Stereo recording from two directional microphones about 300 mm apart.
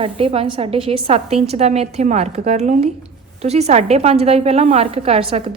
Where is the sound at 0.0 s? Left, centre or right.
Centre.